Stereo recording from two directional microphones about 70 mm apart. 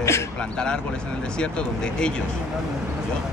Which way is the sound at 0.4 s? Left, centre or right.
Centre.